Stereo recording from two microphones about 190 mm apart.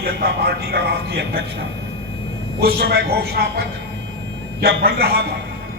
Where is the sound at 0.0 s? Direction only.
55° right (ahead or behind).